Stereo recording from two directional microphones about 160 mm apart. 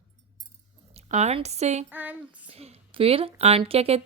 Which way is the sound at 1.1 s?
45° right (ahead or behind).